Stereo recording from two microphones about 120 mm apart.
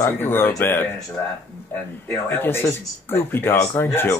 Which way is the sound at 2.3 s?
20° left (ahead or behind).